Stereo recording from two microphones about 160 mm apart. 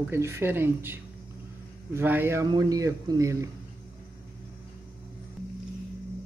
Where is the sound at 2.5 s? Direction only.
25° right (ahead or behind).